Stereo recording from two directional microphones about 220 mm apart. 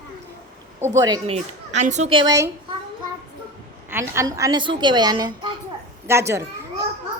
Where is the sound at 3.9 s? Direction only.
10° right (ahead or behind).